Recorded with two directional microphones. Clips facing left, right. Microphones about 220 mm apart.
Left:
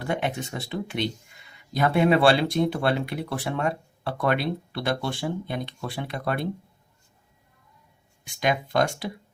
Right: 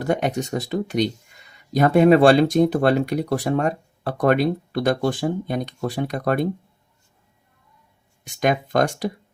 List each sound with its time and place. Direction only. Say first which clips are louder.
0.0 s speech: right 6 dB; 45° right (ahead or behind)
8.4 s speech: right 4 dB; 45° right (ahead or behind)